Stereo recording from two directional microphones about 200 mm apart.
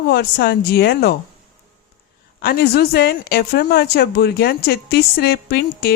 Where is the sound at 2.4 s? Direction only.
50° left (ahead or behind).